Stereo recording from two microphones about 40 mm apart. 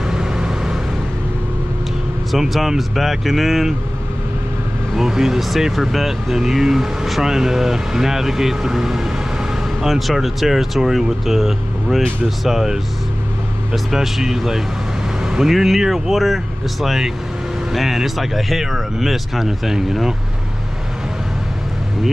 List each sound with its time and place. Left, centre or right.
0.0 s vehicle: centre
2.3 s speech: centre
4.9 s speech: centre
13.8 s speech: centre